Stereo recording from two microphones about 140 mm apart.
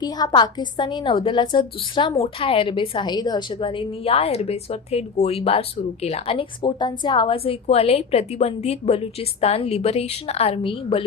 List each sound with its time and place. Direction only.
0.0 s a woman's voice: 30° left (ahead or behind)